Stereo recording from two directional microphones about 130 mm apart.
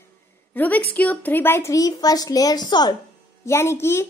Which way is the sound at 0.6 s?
15° left (ahead or behind).